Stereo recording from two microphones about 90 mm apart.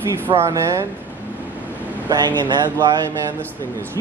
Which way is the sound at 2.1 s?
50° right (ahead or behind).